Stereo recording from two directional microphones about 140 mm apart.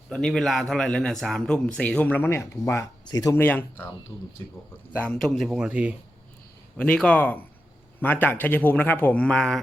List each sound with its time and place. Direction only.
0.1 s a man's voice: 5° left (ahead or behind); by 3.3 s 25° left (ahead or behind)
3.3 s a man's voice: 15° left (ahead or behind)
4.9 s speech: 5° left (ahead or behind); by 6.0 s 10° right (ahead or behind)
6.7 s a man's voice: 5° left (ahead or behind)